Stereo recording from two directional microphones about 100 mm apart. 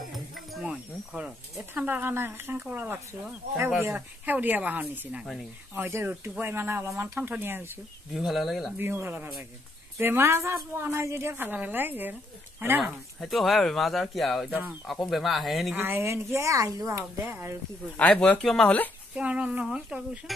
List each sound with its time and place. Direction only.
0.1 s insect: centre (ahead or behind)
1.5 s a woman's voice: 20° right (ahead or behind)
5.2 s speech: 5° left (ahead or behind)
5.8 s a woman's voice: 25° right (ahead or behind)
8.1 s speech: 5° right (ahead or behind)
8.7 s a woman's voice: 25° right (ahead or behind)
12.8 s speech: centre (ahead or behind)
15.7 s a woman's voice: 20° right (ahead or behind)
17.9 s speech: 15° left (ahead or behind)
18.4 s speech: 5° left (ahead or behind)
19.1 s speech: 10° right (ahead or behind)